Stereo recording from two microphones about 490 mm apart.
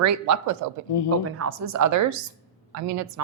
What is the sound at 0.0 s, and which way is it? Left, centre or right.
A woman's voice, right.